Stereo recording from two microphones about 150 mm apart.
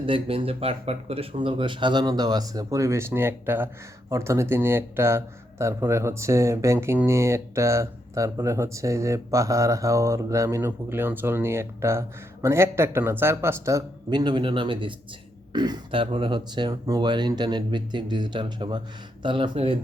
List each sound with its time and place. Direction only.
0.0 s a man's voice: 35° right (ahead or behind)